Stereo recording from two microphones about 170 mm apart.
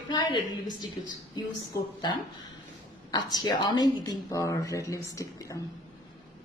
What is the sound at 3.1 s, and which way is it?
A woman's voice, 25° left (ahead or behind).